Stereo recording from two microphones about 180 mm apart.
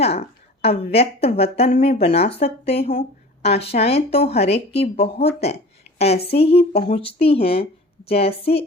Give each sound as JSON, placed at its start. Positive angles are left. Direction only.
{"t": 0.0, "sound": "a woman's voice", "side_deg": 35}